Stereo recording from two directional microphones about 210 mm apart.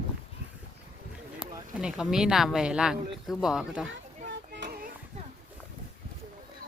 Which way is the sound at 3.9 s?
60° right (ahead or behind).